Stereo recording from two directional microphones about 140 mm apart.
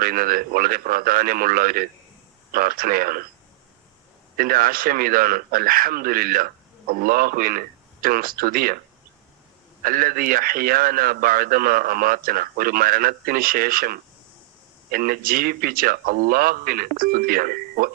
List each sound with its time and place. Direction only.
0.0 s a man's voice: 90° right
4.4 s a man's voice: 90° right
9.8 s a man's voice: 90° right